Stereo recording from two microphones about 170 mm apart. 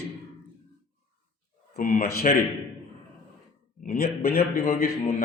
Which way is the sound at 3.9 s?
65° left (ahead or behind).